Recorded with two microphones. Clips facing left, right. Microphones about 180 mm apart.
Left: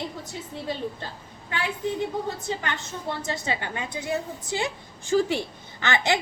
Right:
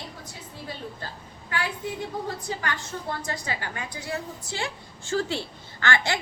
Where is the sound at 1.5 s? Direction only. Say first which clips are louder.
Left 3 dB; 25° left (ahead or behind).